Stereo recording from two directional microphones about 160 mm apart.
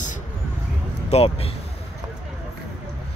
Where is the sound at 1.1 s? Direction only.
40° left (ahead or behind).